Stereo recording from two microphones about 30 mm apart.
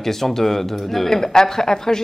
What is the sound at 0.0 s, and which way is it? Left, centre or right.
Speech, centre.